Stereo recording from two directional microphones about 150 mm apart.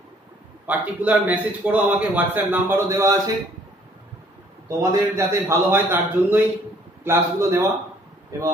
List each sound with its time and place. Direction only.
0.7 s a man's voice: 10° right (ahead or behind)
4.6 s a man's voice: 20° right (ahead or behind)